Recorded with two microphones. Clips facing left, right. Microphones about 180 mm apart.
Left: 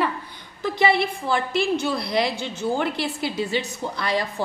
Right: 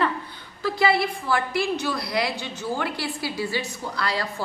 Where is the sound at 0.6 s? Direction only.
20° left (ahead or behind).